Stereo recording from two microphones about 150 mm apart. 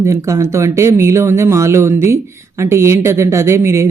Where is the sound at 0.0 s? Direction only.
20° right (ahead or behind).